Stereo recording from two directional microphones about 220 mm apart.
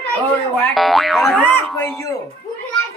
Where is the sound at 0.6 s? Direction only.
Centre (ahead or behind).